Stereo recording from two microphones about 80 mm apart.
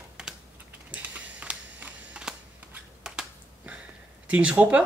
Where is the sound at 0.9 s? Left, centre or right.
Centre.